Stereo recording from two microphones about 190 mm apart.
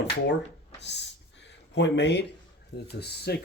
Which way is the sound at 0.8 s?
65° left (ahead or behind).